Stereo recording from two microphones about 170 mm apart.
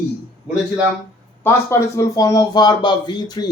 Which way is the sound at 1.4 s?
10° left (ahead or behind).